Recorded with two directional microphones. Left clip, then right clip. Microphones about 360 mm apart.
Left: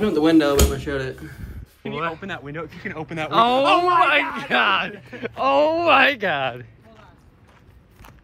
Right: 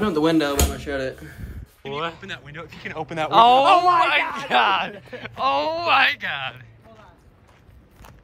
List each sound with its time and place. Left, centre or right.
0.0 s speech: centre
3.6 s speech: right
4.4 s speech: centre